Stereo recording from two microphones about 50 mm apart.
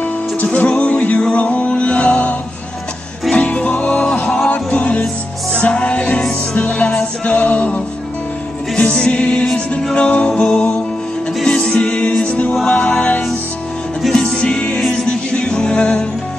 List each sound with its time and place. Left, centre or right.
0.4 s music: left
8.9 s music: centre